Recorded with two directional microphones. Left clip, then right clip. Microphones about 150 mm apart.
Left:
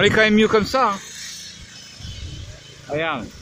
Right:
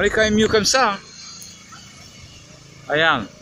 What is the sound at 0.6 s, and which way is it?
Speech, 25° left (ahead or behind).